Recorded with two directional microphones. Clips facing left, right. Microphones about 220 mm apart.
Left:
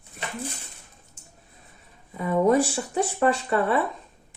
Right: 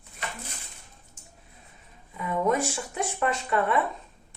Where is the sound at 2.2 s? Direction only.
35° left (ahead or behind).